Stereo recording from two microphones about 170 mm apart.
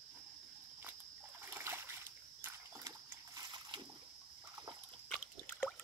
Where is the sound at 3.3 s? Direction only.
25° right (ahead or behind).